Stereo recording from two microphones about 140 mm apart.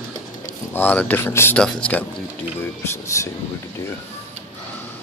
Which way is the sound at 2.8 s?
20° left (ahead or behind).